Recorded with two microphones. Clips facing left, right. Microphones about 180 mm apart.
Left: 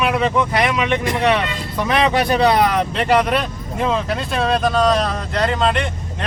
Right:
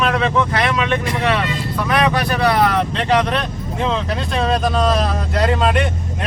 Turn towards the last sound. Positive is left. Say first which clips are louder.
# right 2 dB
turn(degrees=-5)  # may be behind; listen again after turning